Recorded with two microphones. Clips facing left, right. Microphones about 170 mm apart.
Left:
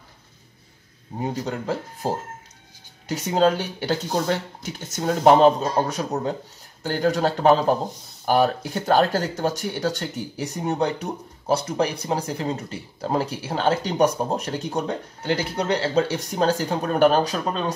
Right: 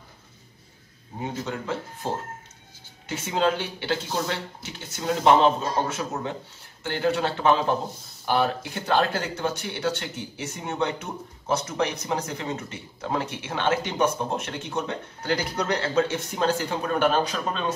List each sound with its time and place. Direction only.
1.2 s speech: 35° left (ahead or behind)